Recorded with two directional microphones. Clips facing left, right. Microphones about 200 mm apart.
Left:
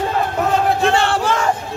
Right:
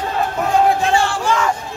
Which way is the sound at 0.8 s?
60° left (ahead or behind).